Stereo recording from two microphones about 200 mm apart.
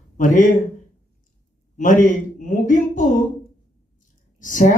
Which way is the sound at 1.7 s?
40° left (ahead or behind).